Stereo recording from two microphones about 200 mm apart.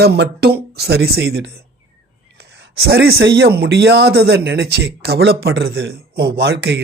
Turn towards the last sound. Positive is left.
turn(degrees=-55)  # may be behind; listen again after turning